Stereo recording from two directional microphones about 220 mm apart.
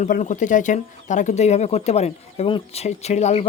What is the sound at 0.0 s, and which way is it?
Speech, 35° left (ahead or behind).